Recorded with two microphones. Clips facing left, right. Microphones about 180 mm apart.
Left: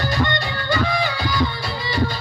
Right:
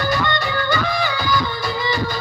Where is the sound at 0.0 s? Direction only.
30° left (ahead or behind).